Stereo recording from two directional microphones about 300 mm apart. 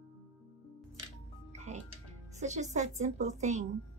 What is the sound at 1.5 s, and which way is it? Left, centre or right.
Music, right.